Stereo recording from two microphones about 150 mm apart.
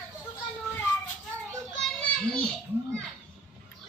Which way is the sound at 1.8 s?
5° left (ahead or behind).